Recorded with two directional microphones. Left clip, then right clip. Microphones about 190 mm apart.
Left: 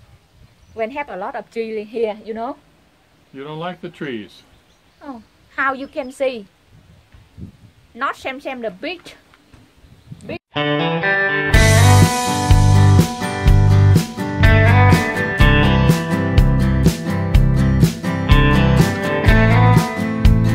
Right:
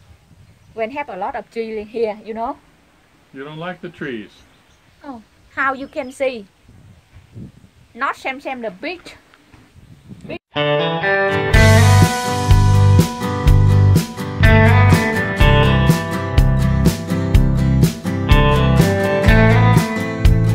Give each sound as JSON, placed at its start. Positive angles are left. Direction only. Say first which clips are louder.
{"t": 0.7, "sound": "a woman's voice", "louder": "right 1 dB", "side_deg": 5}
{"t": 3.3, "sound": "speech", "louder": "left 1 dB", "side_deg": 50}
{"t": 5.0, "sound": "a woman's voice", "louder": "even", "side_deg": 0}
{"t": 7.9, "sound": "a woman's voice", "louder": "right 1 dB", "side_deg": 0}
{"t": 10.2, "sound": "music", "louder": "right 2 dB", "side_deg": 0}